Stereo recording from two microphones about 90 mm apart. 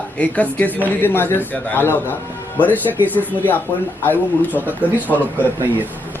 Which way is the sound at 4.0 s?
20° left (ahead or behind).